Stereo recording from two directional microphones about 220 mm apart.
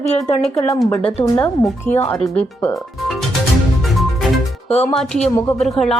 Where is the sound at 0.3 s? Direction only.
30° left (ahead or behind).